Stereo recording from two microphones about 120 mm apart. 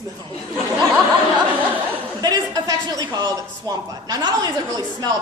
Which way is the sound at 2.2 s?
30° right (ahead or behind).